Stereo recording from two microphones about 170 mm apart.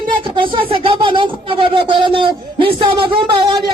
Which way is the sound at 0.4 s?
30° right (ahead or behind).